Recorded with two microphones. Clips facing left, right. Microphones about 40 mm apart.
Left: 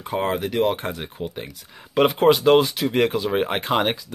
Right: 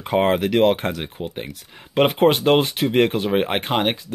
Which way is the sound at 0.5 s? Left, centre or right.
Right.